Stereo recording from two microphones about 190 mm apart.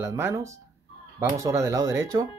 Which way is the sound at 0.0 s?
15° right (ahead or behind).